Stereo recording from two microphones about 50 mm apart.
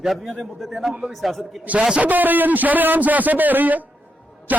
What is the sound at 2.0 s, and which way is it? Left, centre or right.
A man's voice, right.